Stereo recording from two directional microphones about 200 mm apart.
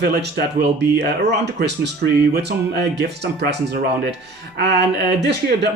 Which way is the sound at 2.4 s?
55° right (ahead or behind).